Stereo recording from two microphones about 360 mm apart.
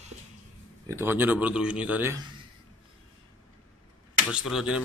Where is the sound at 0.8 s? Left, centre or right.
Centre.